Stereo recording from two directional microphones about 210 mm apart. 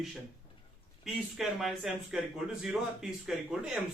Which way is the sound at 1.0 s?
Centre (ahead or behind).